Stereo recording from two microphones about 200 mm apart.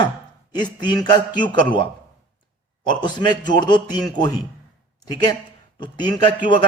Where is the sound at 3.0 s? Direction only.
20° left (ahead or behind).